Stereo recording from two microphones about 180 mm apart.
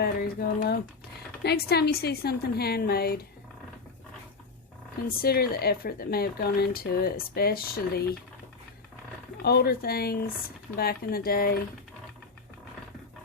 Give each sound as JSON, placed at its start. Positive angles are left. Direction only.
{"t": 0.0, "sound": "speech", "side_deg": 55}
{"t": 5.0, "sound": "speech", "side_deg": 60}
{"t": 9.4, "sound": "speech", "side_deg": 60}